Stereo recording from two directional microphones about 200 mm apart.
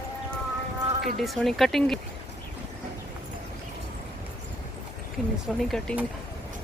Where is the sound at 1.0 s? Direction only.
Centre (ahead or behind).